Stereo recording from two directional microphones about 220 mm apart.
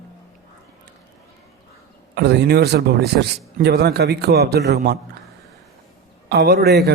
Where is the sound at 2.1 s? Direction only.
50° right (ahead or behind).